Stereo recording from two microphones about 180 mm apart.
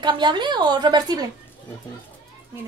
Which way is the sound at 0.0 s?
25° right (ahead or behind).